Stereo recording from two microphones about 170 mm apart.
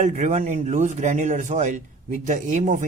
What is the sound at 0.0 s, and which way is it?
A man's voice, 45° right (ahead or behind).